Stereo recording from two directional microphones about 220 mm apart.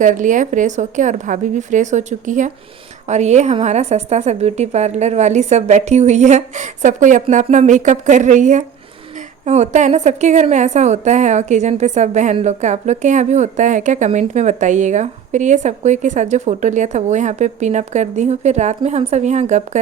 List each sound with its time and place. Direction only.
0.0 s a woman's voice: 35° right (ahead or behind)